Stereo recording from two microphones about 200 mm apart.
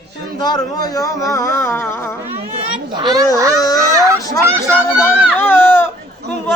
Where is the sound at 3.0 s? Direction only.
20° right (ahead or behind).